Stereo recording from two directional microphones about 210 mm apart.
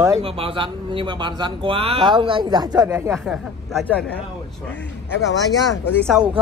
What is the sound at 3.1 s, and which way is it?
Speech, centre (ahead or behind).